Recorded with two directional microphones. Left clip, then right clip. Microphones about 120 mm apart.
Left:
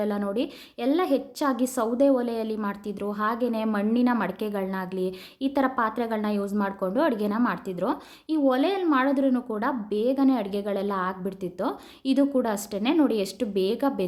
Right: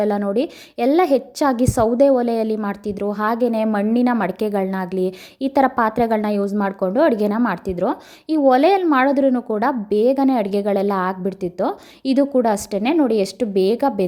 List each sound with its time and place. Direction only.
0.2 s a woman's voice: 45° right (ahead or behind)
9.6 s a woman's voice: 55° right (ahead or behind)